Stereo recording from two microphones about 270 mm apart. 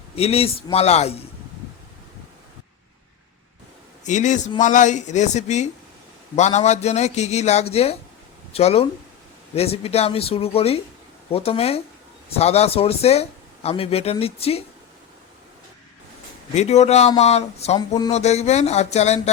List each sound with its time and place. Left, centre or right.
0.2 s speech: left
4.0 s speech: left
16.6 s speech: left